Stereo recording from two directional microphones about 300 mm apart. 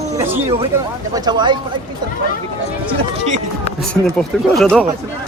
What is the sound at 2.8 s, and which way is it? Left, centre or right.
Speech, right.